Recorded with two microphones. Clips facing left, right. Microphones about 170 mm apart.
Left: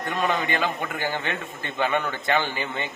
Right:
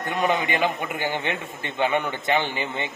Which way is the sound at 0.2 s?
15° right (ahead or behind).